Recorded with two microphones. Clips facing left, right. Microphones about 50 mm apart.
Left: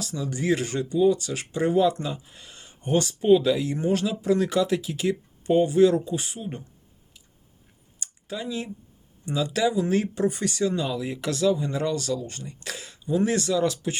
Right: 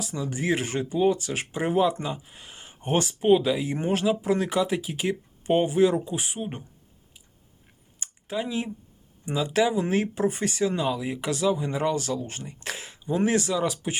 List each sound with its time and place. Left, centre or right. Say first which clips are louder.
0.1 s speech: left 2 dB; right
8.0 s a sound: right 3 dB; right
9.2 s speech: right 1 dB; right